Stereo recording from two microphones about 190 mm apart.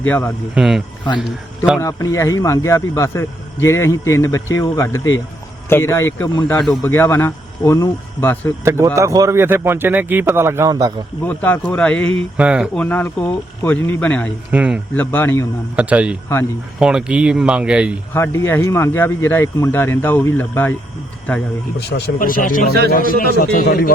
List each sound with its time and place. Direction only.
0.0 s speech: 10° left (ahead or behind)
0.5 s speech: centre (ahead or behind)
1.8 s speech: 15° left (ahead or behind)
6.8 s speech: 10° left (ahead or behind)
9.0 s speech: 15° right (ahead or behind)
11.3 s speech: 10° left (ahead or behind)
12.4 s speech: 5° right (ahead or behind)
12.7 s speech: 10° left (ahead or behind)
14.5 s speech: 5° right (ahead or behind)
14.9 s speech: 10° left (ahead or behind)
15.7 s speech: 5° right (ahead or behind)
18.1 s speech: 15° left (ahead or behind)
21.8 s a man's voice: 60° left (ahead or behind)